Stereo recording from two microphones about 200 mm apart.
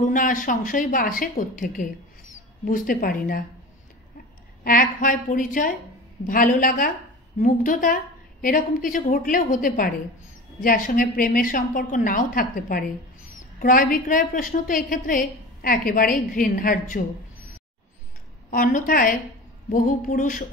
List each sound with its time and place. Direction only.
0.0 s a woman's voice: 40° left (ahead or behind)
4.6 s a woman's voice: 45° left (ahead or behind)
18.5 s a woman's voice: 40° left (ahead or behind)